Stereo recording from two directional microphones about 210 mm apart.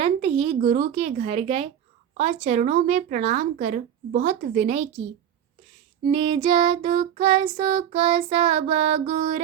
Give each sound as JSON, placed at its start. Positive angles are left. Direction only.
{"t": 0.0, "sound": "a woman's voice", "side_deg": -25}
{"t": 6.1, "sound": "child singing", "side_deg": -25}